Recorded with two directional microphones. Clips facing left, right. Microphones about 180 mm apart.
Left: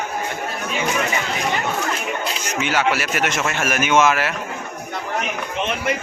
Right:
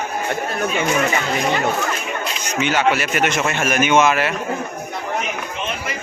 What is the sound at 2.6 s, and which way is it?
Speech, 5° left (ahead or behind).